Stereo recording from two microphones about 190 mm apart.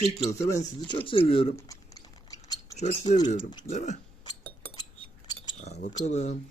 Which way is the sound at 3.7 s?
40° left (ahead or behind).